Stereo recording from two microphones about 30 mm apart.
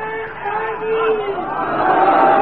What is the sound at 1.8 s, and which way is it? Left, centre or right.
Crowd, centre.